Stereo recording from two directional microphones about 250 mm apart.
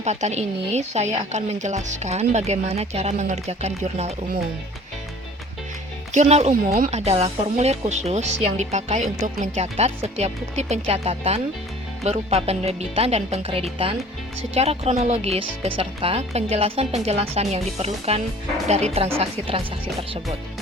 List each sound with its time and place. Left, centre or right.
0.0 s speech: right
6.1 s speech: right